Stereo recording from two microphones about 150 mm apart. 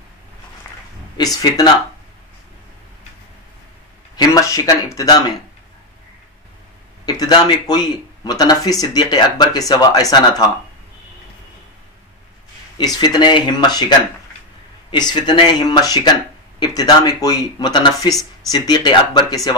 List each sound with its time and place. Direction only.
1.1 s speech: 25° left (ahead or behind)
4.2 s speech: 20° left (ahead or behind)
7.1 s speech: 25° left (ahead or behind)
12.7 s speech: 25° left (ahead or behind)